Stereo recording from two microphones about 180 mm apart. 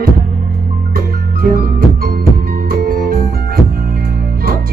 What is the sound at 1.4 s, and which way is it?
Music, 55° right (ahead or behind).